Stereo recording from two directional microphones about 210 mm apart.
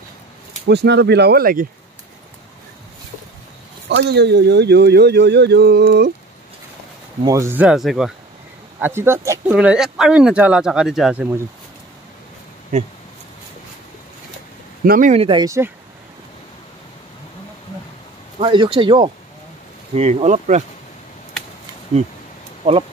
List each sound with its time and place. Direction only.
0.7 s speech: 55° right (ahead or behind)
3.9 s speech: 55° right (ahead or behind)
7.2 s speech: 15° right (ahead or behind)
14.9 s speech: 35° right (ahead or behind)
15.2 s speech: 20° right (ahead or behind)
18.4 s speech: 25° right (ahead or behind)
22.6 s speech: 30° right (ahead or behind)